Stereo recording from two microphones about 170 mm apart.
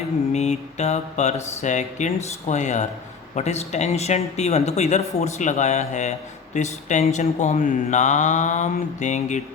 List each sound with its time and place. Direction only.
0.3 s speech: 40° left (ahead or behind)